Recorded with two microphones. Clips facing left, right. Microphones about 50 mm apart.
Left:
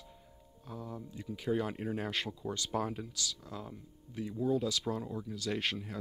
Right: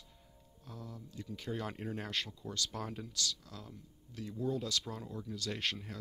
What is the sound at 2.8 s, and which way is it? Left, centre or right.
Speech, centre.